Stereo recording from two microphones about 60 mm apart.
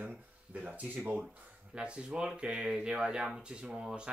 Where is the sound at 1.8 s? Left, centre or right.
Centre.